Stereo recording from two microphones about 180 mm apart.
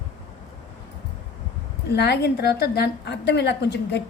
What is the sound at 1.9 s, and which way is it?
A woman's voice, 70° left (ahead or behind).